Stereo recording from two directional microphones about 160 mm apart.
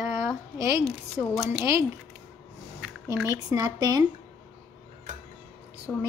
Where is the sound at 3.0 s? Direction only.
20° right (ahead or behind).